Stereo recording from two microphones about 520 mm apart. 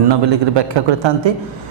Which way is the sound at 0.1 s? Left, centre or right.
Right.